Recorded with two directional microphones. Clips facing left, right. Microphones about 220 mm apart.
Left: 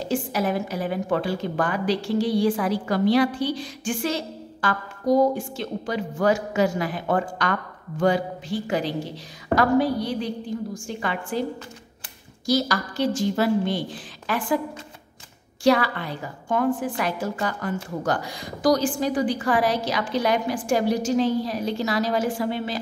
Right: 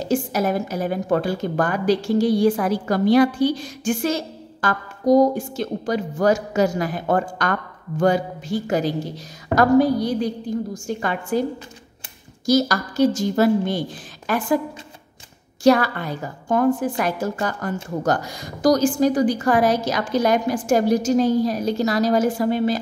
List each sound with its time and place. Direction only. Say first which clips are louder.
0.0 s a woman's voice: right 3 dB; 45° right (ahead or behind)
12.4 s a woman's voice: right 4 dB; 45° right (ahead or behind)
15.6 s a woman's voice: right 4 dB; 45° right (ahead or behind)